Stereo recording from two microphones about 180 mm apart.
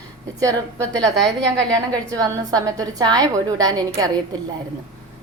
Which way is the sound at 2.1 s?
20° right (ahead or behind).